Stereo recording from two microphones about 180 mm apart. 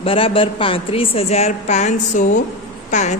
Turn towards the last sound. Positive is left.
turn(degrees=40)  # may be behind; listen again after turning